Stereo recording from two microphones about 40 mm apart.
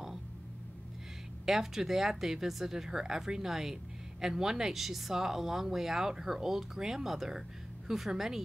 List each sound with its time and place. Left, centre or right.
1.4 s speech: centre